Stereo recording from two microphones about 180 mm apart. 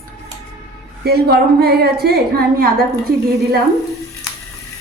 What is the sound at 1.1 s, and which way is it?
A woman's voice, 60° right (ahead or behind).